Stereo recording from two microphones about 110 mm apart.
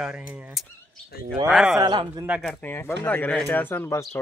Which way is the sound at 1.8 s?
45° right (ahead or behind).